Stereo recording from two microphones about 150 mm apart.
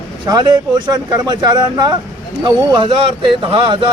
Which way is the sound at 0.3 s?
25° right (ahead or behind).